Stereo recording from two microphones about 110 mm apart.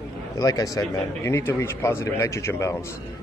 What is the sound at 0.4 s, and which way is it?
Speech, 35° left (ahead or behind).